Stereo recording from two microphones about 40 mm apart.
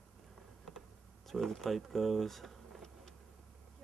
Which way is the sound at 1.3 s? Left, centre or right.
Centre.